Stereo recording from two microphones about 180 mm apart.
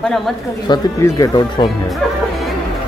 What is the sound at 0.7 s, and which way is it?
Speech, 20° left (ahead or behind).